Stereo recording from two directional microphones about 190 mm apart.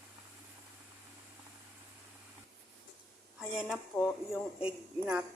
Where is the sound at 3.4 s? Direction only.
5° right (ahead or behind).